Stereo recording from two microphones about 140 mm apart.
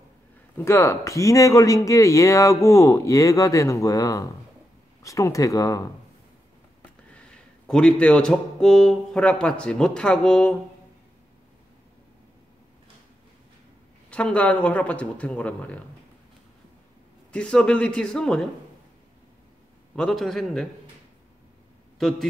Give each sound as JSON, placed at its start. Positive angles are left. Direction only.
{"t": 0.6, "sound": "speech", "side_deg": 20}
{"t": 7.6, "sound": "a man's voice", "side_deg": 5}
{"t": 14.1, "sound": "speech", "side_deg": 10}
{"t": 17.3, "sound": "a man's voice", "side_deg": 5}
{"t": 20.0, "sound": "a man's voice", "side_deg": 5}
{"t": 21.9, "sound": "a man's voice", "side_deg": 0}